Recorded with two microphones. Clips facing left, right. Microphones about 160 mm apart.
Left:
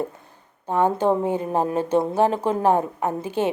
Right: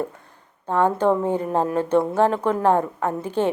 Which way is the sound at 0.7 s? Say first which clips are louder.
Right 1 dB; 15° left (ahead or behind).